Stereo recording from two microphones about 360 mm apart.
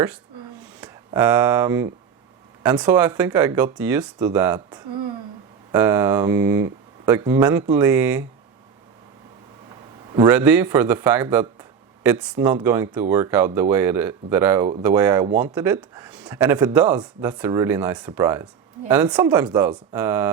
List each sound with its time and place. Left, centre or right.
0.8 s speech: centre
5.8 s speech: centre
10.2 s speech: centre